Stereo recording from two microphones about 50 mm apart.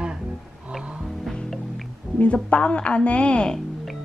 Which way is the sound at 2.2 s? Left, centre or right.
Left.